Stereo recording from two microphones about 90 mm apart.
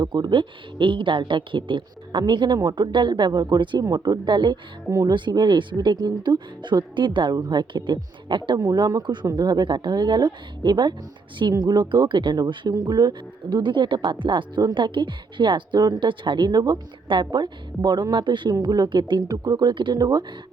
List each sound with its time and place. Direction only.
0.0 s speech: 60° right (ahead or behind)
3.8 s speech: 45° right (ahead or behind)
7.3 s speech: 50° right (ahead or behind)
8.6 s speech: 50° right (ahead or behind)
14.6 s speech: 55° right (ahead or behind)
17.1 s speech: 60° right (ahead or behind)
20.0 s speech: 45° right (ahead or behind)